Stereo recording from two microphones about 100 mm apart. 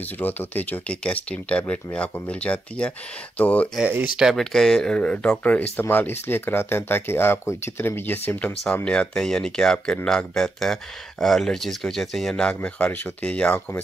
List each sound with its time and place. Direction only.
0.2 s speech: 15° left (ahead or behind)
4.2 s speech: centre (ahead or behind)